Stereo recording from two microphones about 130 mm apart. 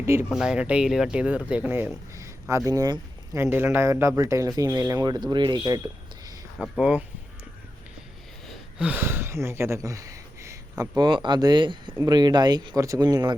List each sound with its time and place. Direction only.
0.0 s speech: 20° right (ahead or behind)
0.3 s speech: 5° right (ahead or behind)
2.1 s a sound: 25° right (ahead or behind)
2.6 s speech: 30° right (ahead or behind)
3.4 s speech: 20° right (ahead or behind)
6.6 s speech: 5° right (ahead or behind)
8.8 s speech: 15° right (ahead or behind); by 13.3 s 30° right (ahead or behind)